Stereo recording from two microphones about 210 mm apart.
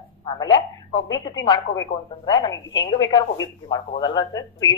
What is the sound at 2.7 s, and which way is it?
Speech, 60° left (ahead or behind).